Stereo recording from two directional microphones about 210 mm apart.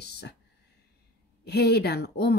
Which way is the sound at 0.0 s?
50° left (ahead or behind).